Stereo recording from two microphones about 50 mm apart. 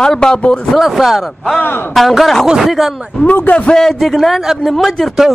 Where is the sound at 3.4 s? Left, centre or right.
Left.